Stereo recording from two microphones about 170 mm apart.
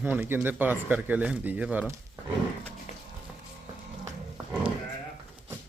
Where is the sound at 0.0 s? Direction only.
10° right (ahead or behind).